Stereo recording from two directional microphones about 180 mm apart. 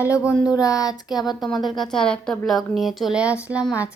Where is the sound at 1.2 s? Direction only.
Centre (ahead or behind).